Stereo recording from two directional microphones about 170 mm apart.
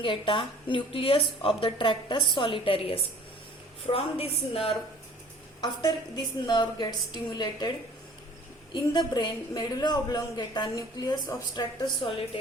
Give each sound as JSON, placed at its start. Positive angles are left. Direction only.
{"t": 0.0, "sound": "a woman's voice", "side_deg": 30}
{"t": 8.7, "sound": "a woman's voice", "side_deg": 25}
{"t": 12.0, "sound": "a woman's voice", "side_deg": 35}